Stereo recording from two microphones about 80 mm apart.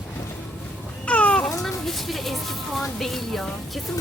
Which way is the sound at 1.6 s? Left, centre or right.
Centre.